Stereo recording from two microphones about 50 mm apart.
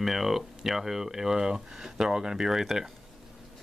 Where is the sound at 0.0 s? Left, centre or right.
Centre.